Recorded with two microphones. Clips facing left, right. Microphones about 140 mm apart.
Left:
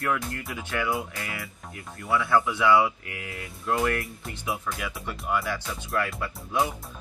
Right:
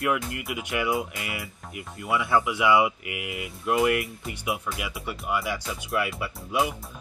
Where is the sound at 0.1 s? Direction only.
20° right (ahead or behind).